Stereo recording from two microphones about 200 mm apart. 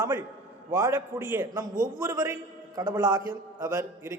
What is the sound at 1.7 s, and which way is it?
Speech, 40° right (ahead or behind).